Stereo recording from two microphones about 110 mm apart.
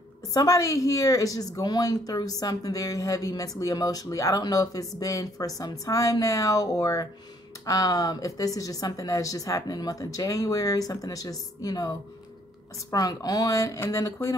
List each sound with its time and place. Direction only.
0.3 s a woman's voice: 35° left (ahead or behind)
13.8 s music: 30° left (ahead or behind)